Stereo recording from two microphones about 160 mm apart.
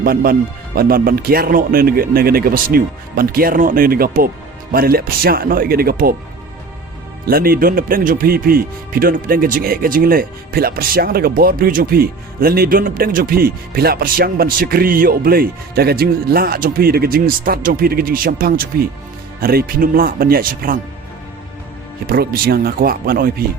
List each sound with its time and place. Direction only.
0.0 s speech: 70° right (ahead or behind)
7.3 s speech: 65° right (ahead or behind)
22.0 s speech: 75° right (ahead or behind)